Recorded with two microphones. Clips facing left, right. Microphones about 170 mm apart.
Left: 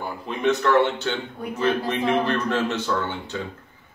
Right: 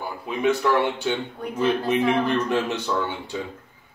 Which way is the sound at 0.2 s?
10° right (ahead or behind).